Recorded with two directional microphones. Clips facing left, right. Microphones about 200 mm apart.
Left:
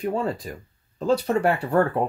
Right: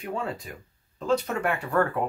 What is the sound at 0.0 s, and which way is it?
Speech, 35° left (ahead or behind).